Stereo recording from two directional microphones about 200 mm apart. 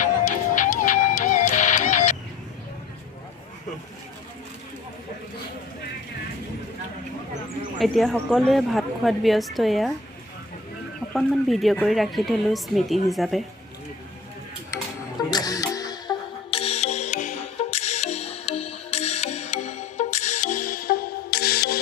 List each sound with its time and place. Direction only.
0.0 s music: 40° left (ahead or behind)
7.8 s a woman's voice: centre (ahead or behind)
11.1 s a woman's voice: centre (ahead or behind)
15.3 s music: 20° left (ahead or behind); by 21.8 s 50° left (ahead or behind)